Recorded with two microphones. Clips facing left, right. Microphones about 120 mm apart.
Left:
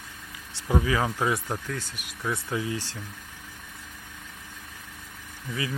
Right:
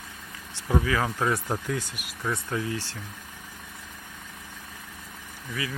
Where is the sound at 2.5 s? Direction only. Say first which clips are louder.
Even; 15° left (ahead or behind).